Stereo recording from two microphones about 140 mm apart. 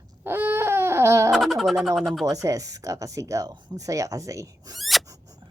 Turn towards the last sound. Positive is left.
turn(degrees=0)  # may be behind; listen again after turning